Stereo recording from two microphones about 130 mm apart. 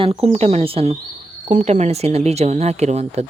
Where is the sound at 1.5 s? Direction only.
70° right (ahead or behind).